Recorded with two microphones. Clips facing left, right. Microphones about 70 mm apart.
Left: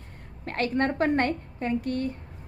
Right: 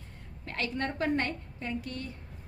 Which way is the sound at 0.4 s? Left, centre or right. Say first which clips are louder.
Left 8 dB; left.